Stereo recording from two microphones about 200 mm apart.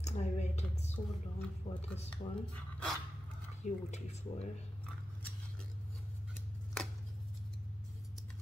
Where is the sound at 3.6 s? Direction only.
35° left (ahead or behind).